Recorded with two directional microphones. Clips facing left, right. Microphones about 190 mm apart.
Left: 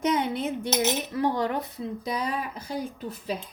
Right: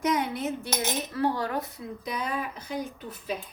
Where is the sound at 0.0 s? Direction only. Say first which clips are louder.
Left 2 dB; 25° left (ahead or behind).